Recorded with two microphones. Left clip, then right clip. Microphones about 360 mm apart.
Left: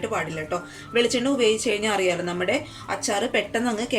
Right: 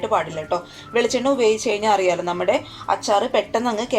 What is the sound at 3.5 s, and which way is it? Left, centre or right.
Speech, centre.